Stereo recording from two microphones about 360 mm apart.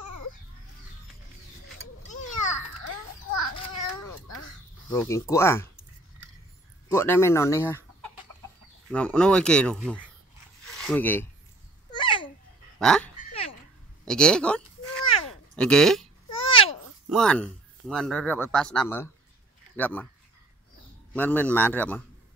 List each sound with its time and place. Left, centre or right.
2.0 s children playing: left
4.8 s speech: centre
6.9 s speech: centre
8.9 s speech: centre
11.9 s babbling: centre
12.7 s speech: centre
14.0 s a sound: centre
15.5 s speech: centre
16.3 s babbling: centre
17.1 s speech: centre
21.1 s speech: centre